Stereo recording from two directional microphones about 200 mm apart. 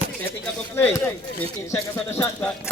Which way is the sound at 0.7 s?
10° left (ahead or behind).